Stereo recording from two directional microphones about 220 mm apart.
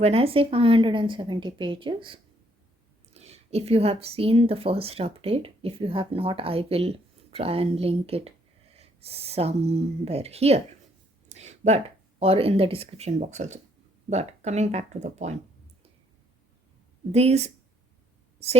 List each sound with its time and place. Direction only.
0.0 s speech: 25° right (ahead or behind)
11.3 s a sound: 30° right (ahead or behind)
12.2 s speech: 25° right (ahead or behind)
17.1 s speech: 30° right (ahead or behind)